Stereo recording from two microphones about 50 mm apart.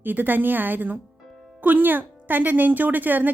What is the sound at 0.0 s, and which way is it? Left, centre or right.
A woman's voice, right.